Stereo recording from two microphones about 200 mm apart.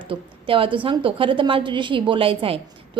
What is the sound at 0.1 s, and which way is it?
A woman's voice, 25° right (ahead or behind).